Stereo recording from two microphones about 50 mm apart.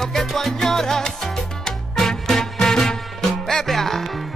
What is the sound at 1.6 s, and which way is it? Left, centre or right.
Music, centre.